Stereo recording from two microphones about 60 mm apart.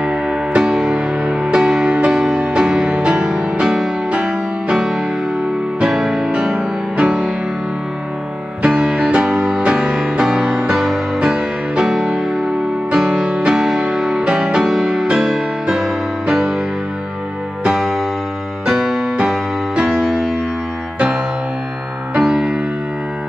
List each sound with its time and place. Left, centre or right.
0.0 s music: centre
2.6 s music: centre
8.6 s music: centre
13.1 s music: centre
17.6 s music: centre
22.1 s music: centre